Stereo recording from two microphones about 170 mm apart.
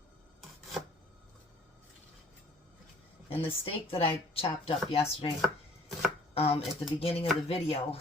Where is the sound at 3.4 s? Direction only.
35° left (ahead or behind).